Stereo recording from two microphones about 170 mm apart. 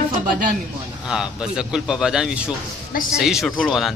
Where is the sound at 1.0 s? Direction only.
5° right (ahead or behind).